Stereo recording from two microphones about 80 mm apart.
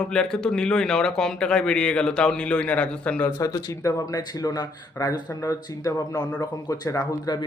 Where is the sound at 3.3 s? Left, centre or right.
Left.